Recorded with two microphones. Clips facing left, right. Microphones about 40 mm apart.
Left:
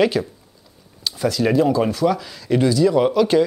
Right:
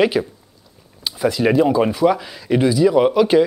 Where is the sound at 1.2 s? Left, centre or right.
Centre.